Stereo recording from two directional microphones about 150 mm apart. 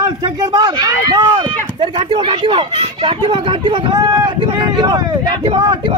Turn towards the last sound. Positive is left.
turn(degrees=-30)  # may be behind; listen again after turning